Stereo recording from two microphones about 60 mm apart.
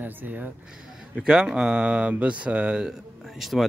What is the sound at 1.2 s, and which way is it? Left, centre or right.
Speech, centre.